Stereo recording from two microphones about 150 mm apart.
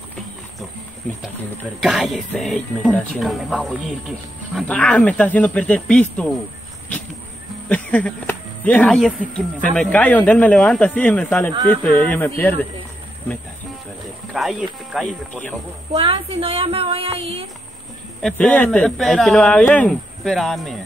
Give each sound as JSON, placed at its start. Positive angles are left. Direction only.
{"t": 1.8, "sound": "a man's voice", "side_deg": 0}
{"t": 7.6, "sound": "a man's voice", "side_deg": 10}
{"t": 14.3, "sound": "a man's voice", "side_deg": 0}
{"t": 15.9, "sound": "a woman's voice", "side_deg": -40}
{"t": 18.2, "sound": "a man's voice", "side_deg": 10}